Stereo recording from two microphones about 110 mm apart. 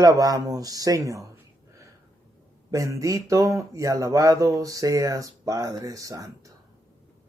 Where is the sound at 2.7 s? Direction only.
30° right (ahead or behind).